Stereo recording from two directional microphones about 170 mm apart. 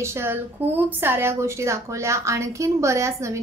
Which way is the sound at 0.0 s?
15° right (ahead or behind).